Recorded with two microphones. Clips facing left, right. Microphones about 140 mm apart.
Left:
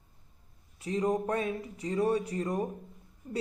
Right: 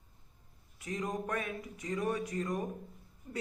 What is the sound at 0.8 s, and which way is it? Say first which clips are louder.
Speech: left 8 dB; 30° left (ahead or behind).